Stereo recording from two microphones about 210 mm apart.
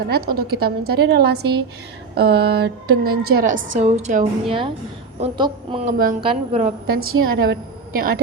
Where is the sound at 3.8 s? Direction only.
35° right (ahead or behind).